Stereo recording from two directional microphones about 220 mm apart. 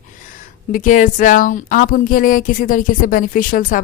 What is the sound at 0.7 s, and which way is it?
A woman's voice, 35° left (ahead or behind).